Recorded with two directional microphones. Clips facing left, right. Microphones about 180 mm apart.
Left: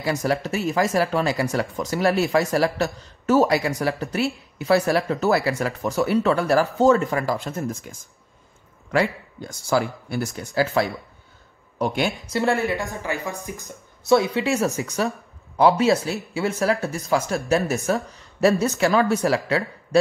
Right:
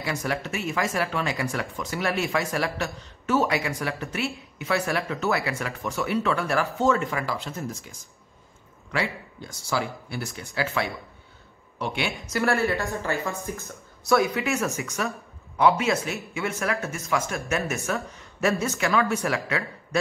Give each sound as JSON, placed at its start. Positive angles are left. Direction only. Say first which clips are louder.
{"t": 0.0, "sound": "speech", "louder": "left 6 dB", "side_deg": 35}
{"t": 8.9, "sound": "speech", "louder": "left 7 dB", "side_deg": 45}
{"t": 12.3, "sound": "speech", "louder": "right 1 dB", "side_deg": 20}
{"t": 18.1, "sound": "a sound", "louder": "left 8 dB", "side_deg": 35}
{"t": 18.5, "sound": "speech", "louder": "left 5 dB", "side_deg": 20}
{"t": 18.8, "sound": "speech", "louder": "left 5 dB", "side_deg": 35}